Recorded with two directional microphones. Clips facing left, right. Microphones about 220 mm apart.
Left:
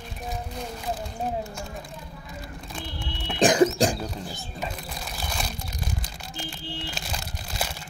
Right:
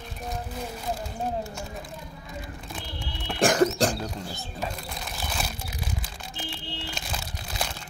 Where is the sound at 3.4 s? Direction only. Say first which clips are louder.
Left 2 dB; 15° left (ahead or behind).